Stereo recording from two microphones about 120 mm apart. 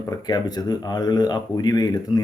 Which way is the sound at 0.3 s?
35° left (ahead or behind).